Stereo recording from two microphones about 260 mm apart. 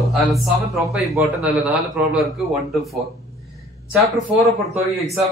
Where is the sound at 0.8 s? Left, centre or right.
Centre.